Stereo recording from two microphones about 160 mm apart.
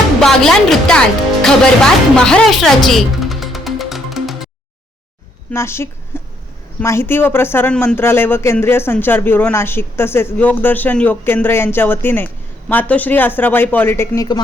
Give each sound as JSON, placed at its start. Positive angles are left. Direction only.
{"t": 0.2, "sound": "speech", "side_deg": 5}
{"t": 5.5, "sound": "speech", "side_deg": 15}
{"t": 6.1, "sound": "a sound", "side_deg": 15}
{"t": 6.7, "sound": "speech", "side_deg": 15}